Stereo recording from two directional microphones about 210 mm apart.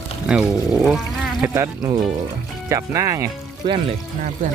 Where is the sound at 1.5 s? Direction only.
15° right (ahead or behind).